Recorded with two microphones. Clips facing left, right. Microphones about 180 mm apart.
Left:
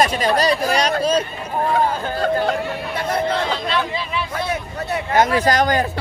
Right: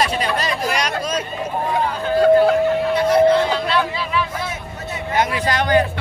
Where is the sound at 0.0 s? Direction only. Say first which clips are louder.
Left 4 dB; 40° left (ahead or behind).